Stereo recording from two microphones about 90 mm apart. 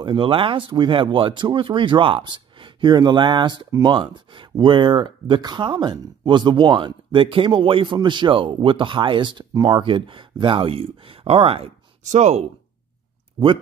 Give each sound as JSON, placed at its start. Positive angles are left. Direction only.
{"t": 0.0, "sound": "speech", "side_deg": -70}
{"t": 5.4, "sound": "speech", "side_deg": -55}